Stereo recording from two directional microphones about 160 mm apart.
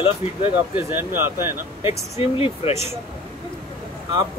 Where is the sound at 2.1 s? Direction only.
35° left (ahead or behind).